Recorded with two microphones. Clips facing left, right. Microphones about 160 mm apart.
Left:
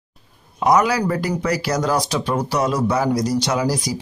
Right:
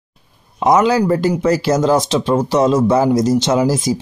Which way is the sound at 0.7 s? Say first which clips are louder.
Right 4 dB; 25° right (ahead or behind).